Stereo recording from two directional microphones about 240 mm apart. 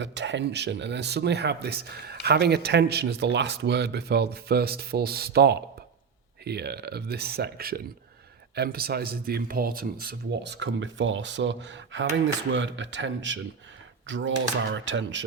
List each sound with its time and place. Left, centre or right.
0.0 s speech: right